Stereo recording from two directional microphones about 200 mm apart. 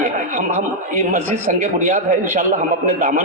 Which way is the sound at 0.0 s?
40° right (ahead or behind).